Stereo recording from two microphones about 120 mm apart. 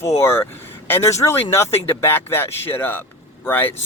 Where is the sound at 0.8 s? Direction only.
20° left (ahead or behind).